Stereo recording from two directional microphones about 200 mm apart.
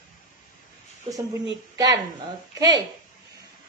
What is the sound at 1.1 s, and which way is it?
Speech, 25° right (ahead or behind).